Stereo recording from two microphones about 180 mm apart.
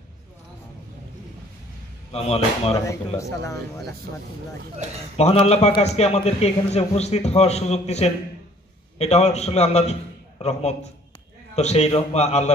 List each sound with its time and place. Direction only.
2.1 s a man's voice: 35° left (ahead or behind)
3.2 s speech: 15° left (ahead or behind)
5.1 s a man's voice: 35° left (ahead or behind)